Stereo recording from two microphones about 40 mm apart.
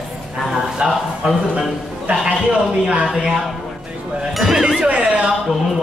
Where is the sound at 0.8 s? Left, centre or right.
Right.